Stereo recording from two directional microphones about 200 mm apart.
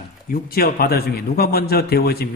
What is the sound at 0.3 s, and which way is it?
A man's voice, 50° left (ahead or behind).